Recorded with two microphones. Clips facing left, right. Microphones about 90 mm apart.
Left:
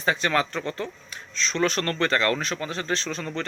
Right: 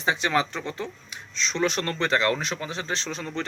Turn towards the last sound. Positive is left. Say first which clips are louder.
# left 1 dB
turn(degrees=-20)  # may be behind; listen again after turning